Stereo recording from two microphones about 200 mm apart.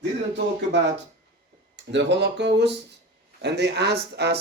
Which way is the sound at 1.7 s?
60° right (ahead or behind).